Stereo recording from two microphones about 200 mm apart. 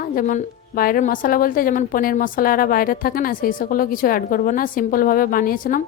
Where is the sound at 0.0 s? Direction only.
40° left (ahead or behind).